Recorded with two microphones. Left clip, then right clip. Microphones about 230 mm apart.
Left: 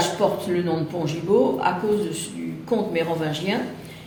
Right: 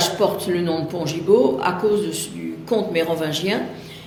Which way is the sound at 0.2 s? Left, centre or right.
Right.